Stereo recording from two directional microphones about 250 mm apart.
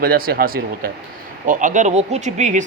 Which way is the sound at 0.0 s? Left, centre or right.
Right.